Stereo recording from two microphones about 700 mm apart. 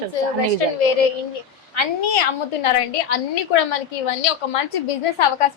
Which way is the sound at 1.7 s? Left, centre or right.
Left.